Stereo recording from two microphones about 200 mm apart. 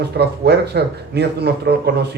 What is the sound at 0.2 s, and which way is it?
Speech, 55° right (ahead or behind).